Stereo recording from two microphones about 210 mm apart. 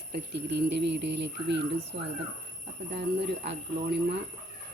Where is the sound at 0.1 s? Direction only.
55° right (ahead or behind).